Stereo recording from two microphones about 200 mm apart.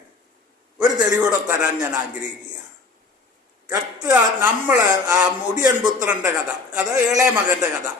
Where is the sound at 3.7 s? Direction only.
15° right (ahead or behind).